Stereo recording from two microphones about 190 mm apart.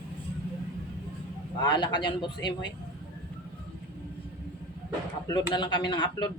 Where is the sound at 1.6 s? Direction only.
25° left (ahead or behind).